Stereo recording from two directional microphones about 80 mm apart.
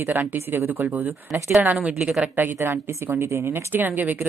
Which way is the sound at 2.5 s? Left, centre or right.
Right.